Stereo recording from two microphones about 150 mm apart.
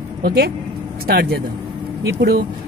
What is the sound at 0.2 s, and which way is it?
Speech, 90° right.